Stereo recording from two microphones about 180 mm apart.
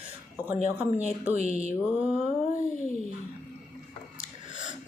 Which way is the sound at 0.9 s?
40° left (ahead or behind).